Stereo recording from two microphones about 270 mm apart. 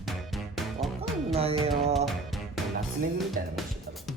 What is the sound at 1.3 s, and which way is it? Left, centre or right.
Music, right.